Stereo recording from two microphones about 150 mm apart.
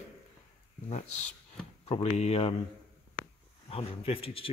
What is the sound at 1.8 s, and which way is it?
Speech, 45° left (ahead or behind).